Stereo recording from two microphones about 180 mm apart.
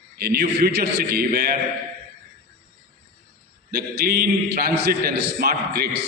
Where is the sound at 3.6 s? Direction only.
60° right (ahead or behind).